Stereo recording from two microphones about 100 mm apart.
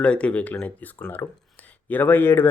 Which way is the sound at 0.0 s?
10° left (ahead or behind).